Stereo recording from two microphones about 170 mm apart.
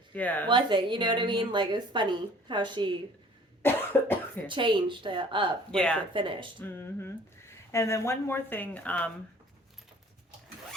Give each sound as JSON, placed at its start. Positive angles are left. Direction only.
{"t": 0.1, "sound": "speech", "side_deg": 10}
{"t": 0.4, "sound": "a woman's voice", "side_deg": -30}
{"t": 3.6, "sound": "cough", "side_deg": 10}
{"t": 4.4, "sound": "a woman's voice", "side_deg": -30}
{"t": 5.7, "sound": "speech", "side_deg": 5}
{"t": 6.1, "sound": "a woman's voice", "side_deg": -30}
{"t": 6.6, "sound": "speech", "side_deg": 15}